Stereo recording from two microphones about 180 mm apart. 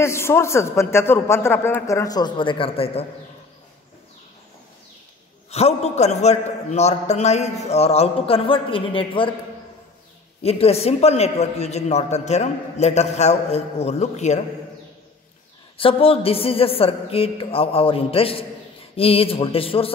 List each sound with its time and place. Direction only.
0.0 s a man's voice: 15° left (ahead or behind); by 3.1 s 30° left (ahead or behind)
5.5 s a woman's voice: 35° left (ahead or behind)
10.4 s a woman's voice: 35° left (ahead or behind)
15.8 s a woman's voice: 30° left (ahead or behind)